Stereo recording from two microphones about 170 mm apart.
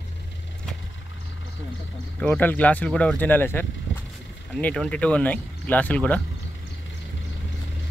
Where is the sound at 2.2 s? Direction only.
10° left (ahead or behind).